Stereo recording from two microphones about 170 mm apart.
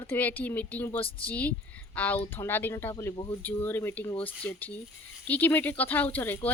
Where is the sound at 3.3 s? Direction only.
10° left (ahead or behind).